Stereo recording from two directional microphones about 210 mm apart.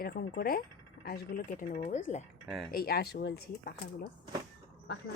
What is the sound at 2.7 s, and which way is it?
Speech, 45° left (ahead or behind).